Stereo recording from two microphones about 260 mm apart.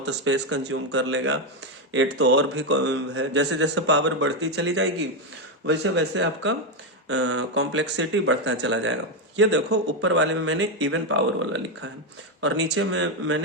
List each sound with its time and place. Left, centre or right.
0.0 s speech: right